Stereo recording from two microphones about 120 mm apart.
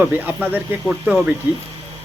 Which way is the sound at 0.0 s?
10° right (ahead or behind).